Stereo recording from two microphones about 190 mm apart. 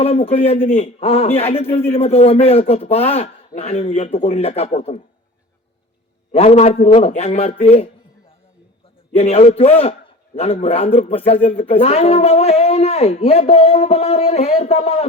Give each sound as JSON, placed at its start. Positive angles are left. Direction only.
{"t": 0.0, "sound": "speech", "side_deg": 30}
{"t": 6.3, "sound": "speech", "side_deg": 35}
{"t": 9.1, "sound": "speech", "side_deg": 35}